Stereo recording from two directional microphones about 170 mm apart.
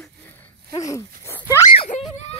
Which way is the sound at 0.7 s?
20° left (ahead or behind).